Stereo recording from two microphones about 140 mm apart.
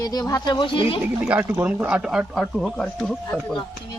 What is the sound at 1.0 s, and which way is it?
Speech, 10° right (ahead or behind).